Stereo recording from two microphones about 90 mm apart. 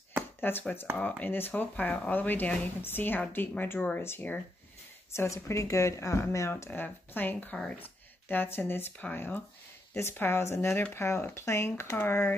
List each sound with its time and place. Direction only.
0.4 s speech: 20° left (ahead or behind)